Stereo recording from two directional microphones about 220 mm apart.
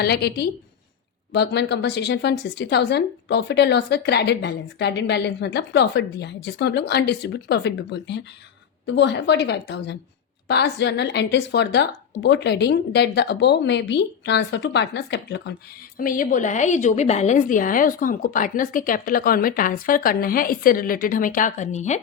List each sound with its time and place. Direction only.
0.0 s a woman's voice: 45° left (ahead or behind)
16.0 s a woman's voice: 40° left (ahead or behind)